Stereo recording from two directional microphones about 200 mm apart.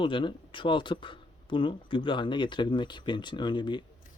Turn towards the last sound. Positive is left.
turn(degrees=25)  # may be behind; listen again after turning